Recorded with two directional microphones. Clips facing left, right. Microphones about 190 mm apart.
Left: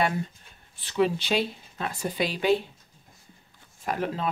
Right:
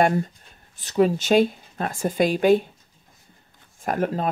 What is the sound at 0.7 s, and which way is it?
Speech, 45° right (ahead or behind).